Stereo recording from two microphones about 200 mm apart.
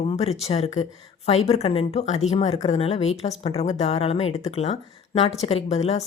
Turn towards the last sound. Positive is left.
turn(degrees=30)  # may be behind; listen again after turning